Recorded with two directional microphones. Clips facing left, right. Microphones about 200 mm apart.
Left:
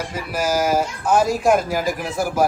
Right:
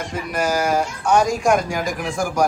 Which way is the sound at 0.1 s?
5° left (ahead or behind).